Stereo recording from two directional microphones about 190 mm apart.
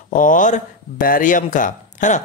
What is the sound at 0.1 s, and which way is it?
Speech, 45° left (ahead or behind).